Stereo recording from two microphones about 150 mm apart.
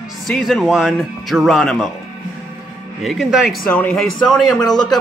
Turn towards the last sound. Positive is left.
turn(degrees=5)  # may be behind; listen again after turning